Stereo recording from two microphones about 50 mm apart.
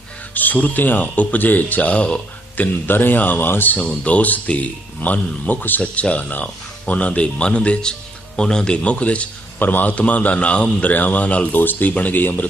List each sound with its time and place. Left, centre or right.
0.3 s speech: left
2.6 s speech: left
3.8 s speech: left
5.8 s speech: left
9.6 s speech: left